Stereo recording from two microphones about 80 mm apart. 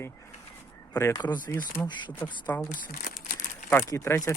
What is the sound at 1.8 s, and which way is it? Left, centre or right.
Speech, left.